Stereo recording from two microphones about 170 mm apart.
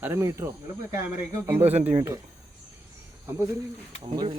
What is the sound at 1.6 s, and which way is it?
Speech, 40° right (ahead or behind).